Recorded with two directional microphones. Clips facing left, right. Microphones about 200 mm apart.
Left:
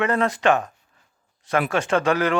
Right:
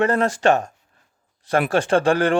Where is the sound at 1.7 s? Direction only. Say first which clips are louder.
Right 4 dB; 30° right (ahead or behind).